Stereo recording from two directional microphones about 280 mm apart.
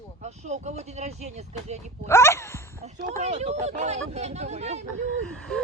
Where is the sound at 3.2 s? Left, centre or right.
Right.